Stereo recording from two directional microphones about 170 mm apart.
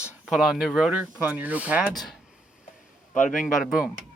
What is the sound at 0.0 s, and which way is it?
Speech, 5° right (ahead or behind).